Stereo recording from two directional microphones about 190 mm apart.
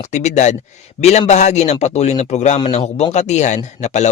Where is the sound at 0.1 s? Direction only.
35° left (ahead or behind).